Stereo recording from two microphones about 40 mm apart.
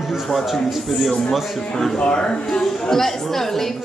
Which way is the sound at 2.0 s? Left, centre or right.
Left.